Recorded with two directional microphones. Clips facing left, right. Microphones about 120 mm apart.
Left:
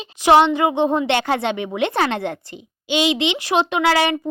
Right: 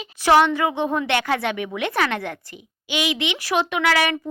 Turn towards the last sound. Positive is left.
turn(degrees=30)  # may be behind; listen again after turning